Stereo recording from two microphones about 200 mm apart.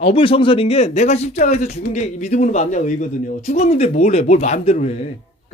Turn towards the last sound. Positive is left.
turn(degrees=35)  # may be behind; listen again after turning